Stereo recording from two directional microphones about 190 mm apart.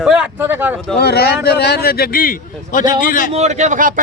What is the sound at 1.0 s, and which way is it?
A man's voice, 55° left (ahead or behind).